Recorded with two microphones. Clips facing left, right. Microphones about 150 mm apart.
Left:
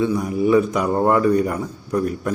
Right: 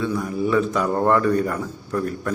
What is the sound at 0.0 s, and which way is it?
A man's voice, 15° left (ahead or behind).